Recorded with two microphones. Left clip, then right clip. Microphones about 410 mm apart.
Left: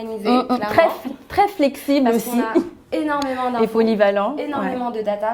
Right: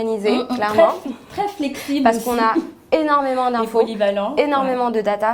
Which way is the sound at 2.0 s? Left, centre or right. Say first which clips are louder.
Right 4 dB; right.